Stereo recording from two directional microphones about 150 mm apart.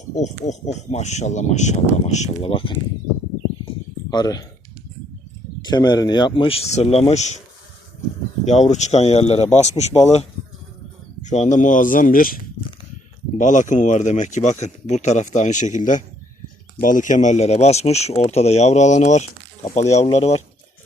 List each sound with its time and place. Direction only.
0.2 s speech: 50° left (ahead or behind)
4.1 s speech: 25° left (ahead or behind)
5.6 s speech: 30° left (ahead or behind); by 7.4 s 50° left (ahead or behind)
8.4 s speech: 50° left (ahead or behind); by 12.4 s 70° left (ahead or behind)
13.4 s speech: 55° left (ahead or behind)